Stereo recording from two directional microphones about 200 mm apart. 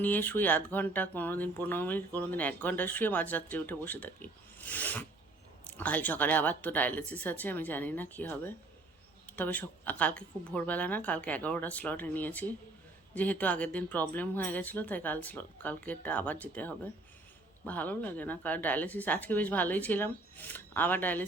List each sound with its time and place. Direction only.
0.0 s speech: 10° left (ahead or behind)